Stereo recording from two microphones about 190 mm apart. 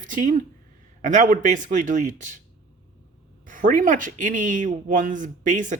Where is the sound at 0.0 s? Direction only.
40° right (ahead or behind).